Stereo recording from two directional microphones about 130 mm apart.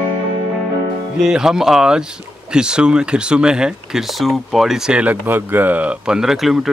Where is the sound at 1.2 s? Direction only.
5° right (ahead or behind).